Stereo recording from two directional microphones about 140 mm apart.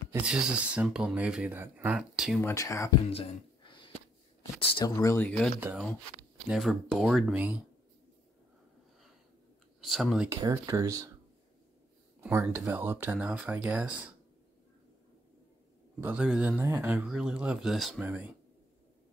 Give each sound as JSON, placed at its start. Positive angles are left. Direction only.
{"t": 0.2, "sound": "speech", "side_deg": -5}
{"t": 2.4, "sound": "speech", "side_deg": 20}
{"t": 3.1, "sound": "a sound", "side_deg": 45}
{"t": 4.6, "sound": "speech", "side_deg": 40}
{"t": 4.8, "sound": "speech", "side_deg": 25}
{"t": 5.2, "sound": "speech", "side_deg": 5}
{"t": 6.5, "sound": "speech", "side_deg": 0}
{"t": 9.8, "sound": "speech", "side_deg": 0}
{"t": 10.3, "sound": "speech", "side_deg": -20}
{"t": 12.2, "sound": "speech", "side_deg": -15}
{"t": 16.0, "sound": "speech", "side_deg": -10}
{"t": 17.0, "sound": "speech", "side_deg": -5}